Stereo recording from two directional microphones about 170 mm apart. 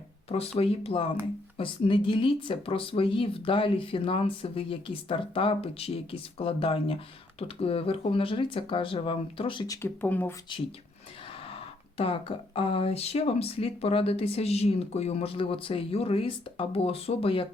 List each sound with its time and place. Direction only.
0.3 s speech: 35° left (ahead or behind)
9.8 s speech: 10° left (ahead or behind)
11.4 s speech: 35° left (ahead or behind)